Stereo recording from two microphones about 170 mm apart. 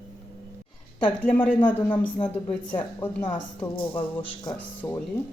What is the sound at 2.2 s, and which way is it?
Speech, 10° left (ahead or behind).